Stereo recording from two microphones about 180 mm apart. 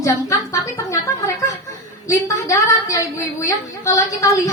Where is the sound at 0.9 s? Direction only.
20° left (ahead or behind).